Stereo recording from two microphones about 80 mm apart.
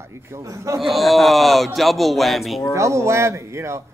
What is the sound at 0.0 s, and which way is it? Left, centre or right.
Speech, right.